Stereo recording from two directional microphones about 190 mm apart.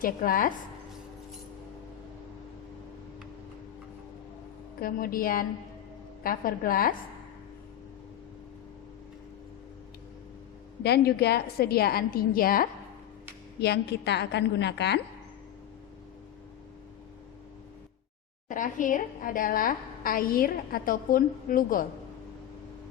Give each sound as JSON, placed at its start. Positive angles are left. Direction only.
{"t": 0.0, "sound": "a woman's voice", "side_deg": 45}
{"t": 4.8, "sound": "a woman's voice", "side_deg": 50}
{"t": 10.8, "sound": "a woman's voice", "side_deg": 60}
{"t": 18.4, "sound": "a woman's voice", "side_deg": 45}